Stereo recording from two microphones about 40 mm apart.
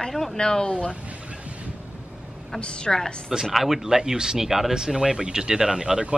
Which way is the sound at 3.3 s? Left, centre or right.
Centre.